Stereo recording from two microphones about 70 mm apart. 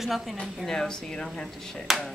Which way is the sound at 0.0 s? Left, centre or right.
Centre.